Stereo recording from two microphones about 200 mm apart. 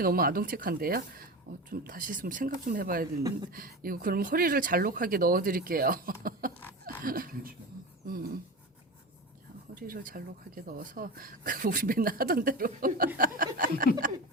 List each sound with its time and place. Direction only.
0.0 s speech: 45° right (ahead or behind)
8.0 s beatboxing: 45° right (ahead or behind)
9.7 s speech: 45° right (ahead or behind)